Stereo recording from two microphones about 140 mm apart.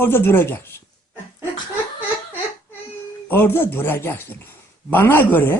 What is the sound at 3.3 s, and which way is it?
Speech, 15° left (ahead or behind).